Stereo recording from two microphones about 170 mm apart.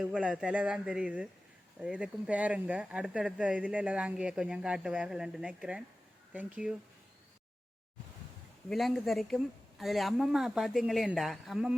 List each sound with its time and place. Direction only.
0.0 s speech: 5° right (ahead or behind)
8.7 s speech: centre (ahead or behind)